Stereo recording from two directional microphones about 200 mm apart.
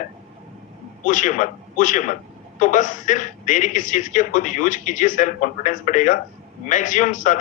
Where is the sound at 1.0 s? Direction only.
40° left (ahead or behind).